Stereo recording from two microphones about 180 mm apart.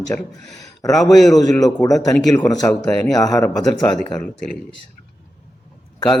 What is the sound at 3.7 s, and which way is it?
Speech, 20° left (ahead or behind).